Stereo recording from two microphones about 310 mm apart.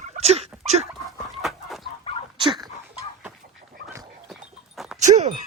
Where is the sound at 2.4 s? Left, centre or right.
Centre.